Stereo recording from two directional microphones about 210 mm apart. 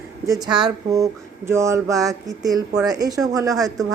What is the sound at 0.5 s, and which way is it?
Speech, 20° right (ahead or behind).